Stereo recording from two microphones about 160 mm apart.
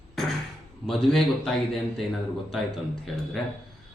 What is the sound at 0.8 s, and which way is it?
Speech, centre (ahead or behind).